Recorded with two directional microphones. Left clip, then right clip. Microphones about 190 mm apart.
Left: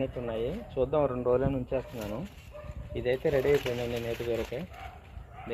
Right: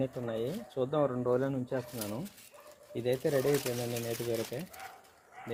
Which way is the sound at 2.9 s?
65° right (ahead or behind).